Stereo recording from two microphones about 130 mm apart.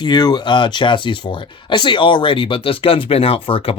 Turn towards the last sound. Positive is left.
turn(degrees=45)  # may be behind; listen again after turning